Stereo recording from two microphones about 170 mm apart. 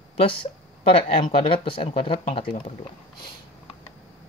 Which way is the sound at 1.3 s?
30° left (ahead or behind).